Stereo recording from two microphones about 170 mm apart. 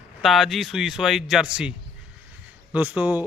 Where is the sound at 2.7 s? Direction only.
10° right (ahead or behind).